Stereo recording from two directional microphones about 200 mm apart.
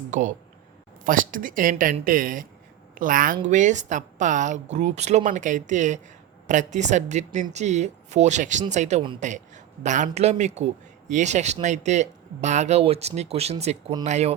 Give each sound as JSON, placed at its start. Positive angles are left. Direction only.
{"t": 0.1, "sound": "a woman's voice", "side_deg": -40}